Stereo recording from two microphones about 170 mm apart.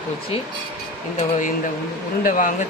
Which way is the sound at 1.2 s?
50° left (ahead or behind).